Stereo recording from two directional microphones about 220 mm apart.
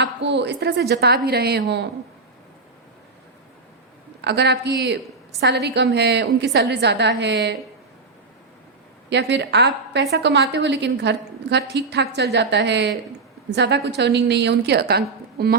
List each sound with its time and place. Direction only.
0.0 s a woman's voice: 50° right (ahead or behind)
4.2 s a woman's voice: 50° right (ahead or behind)
9.0 s a woman's voice: 50° right (ahead or behind)